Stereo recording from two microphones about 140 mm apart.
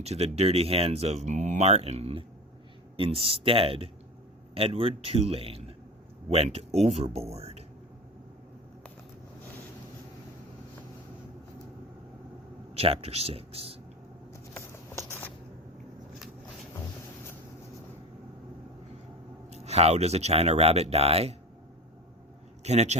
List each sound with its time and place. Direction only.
0.0 s speech: 50° right (ahead or behind)
12.7 s speech: 45° right (ahead or behind)
14.5 s a sound: 20° left (ahead or behind)
19.5 s speech: 50° right (ahead or behind)
22.6 s speech: 50° right (ahead or behind)